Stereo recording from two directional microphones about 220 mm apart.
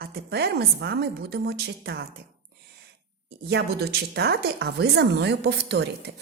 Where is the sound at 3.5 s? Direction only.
45° right (ahead or behind).